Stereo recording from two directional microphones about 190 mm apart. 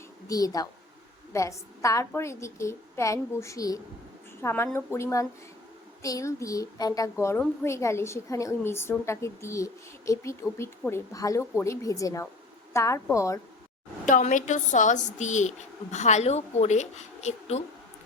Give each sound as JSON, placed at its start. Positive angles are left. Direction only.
{"t": 0.3, "sound": "a woman's voice", "side_deg": 20}
{"t": 14.0, "sound": "a woman's voice", "side_deg": 40}